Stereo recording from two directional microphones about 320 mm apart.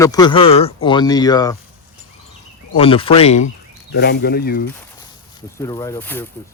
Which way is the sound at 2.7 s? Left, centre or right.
Centre.